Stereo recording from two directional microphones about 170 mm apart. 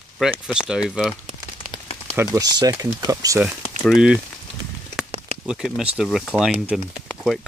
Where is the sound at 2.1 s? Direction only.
20° right (ahead or behind).